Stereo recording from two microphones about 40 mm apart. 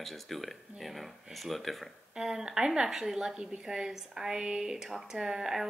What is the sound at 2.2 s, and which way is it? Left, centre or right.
A woman's voice, centre.